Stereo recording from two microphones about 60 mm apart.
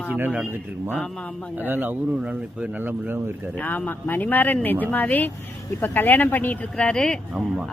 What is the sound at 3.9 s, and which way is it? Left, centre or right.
Speech, left.